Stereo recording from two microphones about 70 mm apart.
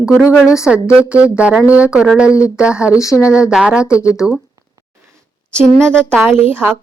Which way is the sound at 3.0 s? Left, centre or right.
Left.